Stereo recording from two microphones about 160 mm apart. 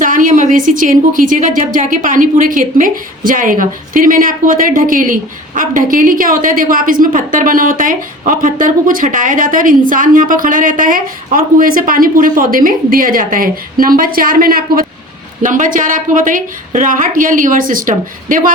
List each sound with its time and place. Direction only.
0.0 s a woman's voice: 55° right (ahead or behind)